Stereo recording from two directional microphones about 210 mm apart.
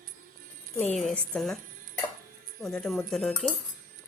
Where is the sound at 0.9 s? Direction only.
5° left (ahead or behind).